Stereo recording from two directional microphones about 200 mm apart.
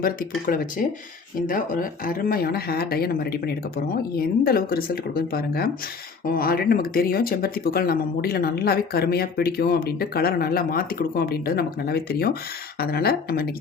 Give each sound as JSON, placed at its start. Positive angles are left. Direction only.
{"t": 0.0, "sound": "speech", "side_deg": 45}